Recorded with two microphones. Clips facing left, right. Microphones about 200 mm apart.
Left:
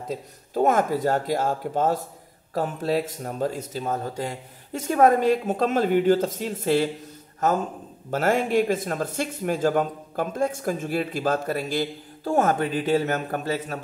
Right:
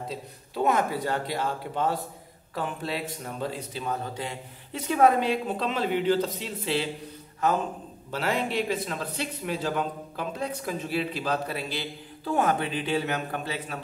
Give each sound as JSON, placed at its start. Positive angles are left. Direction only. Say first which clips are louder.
{"t": 0.6, "sound": "a man's voice", "louder": "left 4 dB", "side_deg": 45}